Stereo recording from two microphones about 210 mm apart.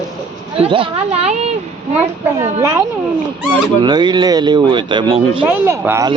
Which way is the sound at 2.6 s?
15° right (ahead or behind).